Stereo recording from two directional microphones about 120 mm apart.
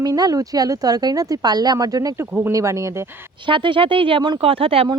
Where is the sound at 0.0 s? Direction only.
30° right (ahead or behind).